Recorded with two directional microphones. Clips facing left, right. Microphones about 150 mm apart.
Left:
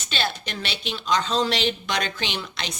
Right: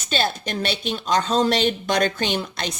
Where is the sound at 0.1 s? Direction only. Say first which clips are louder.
Right 5 dB; 45° right (ahead or behind).